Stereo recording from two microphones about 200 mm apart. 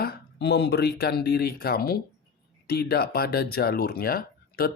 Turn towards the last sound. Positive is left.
turn(degrees=50)  # may be behind; listen again after turning